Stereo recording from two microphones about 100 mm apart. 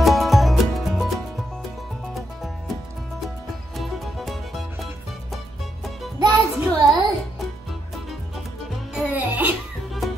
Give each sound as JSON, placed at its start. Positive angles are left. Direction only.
{"t": 0.0, "sound": "music", "side_deg": 0}
{"t": 3.7, "sound": "music", "side_deg": 0}
{"t": 6.1, "sound": "music", "side_deg": -30}
{"t": 6.6, "sound": "music", "side_deg": 0}
{"t": 8.9, "sound": "music", "side_deg": -15}
{"t": 10.0, "sound": "music", "side_deg": 0}